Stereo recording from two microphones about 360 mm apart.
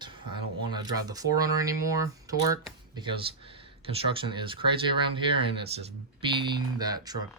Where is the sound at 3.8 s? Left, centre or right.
Centre.